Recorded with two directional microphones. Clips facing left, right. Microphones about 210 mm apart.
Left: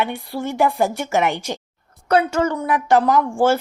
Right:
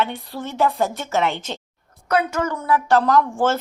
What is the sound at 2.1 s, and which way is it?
Speech, 30° left (ahead or behind).